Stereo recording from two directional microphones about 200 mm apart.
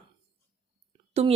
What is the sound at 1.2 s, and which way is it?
Speech, 30° right (ahead or behind).